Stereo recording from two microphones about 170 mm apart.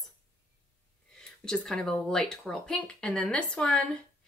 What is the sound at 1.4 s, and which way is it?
Speech, 5° left (ahead or behind).